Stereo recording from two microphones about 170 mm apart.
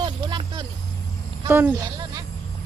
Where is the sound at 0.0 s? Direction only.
25° right (ahead or behind).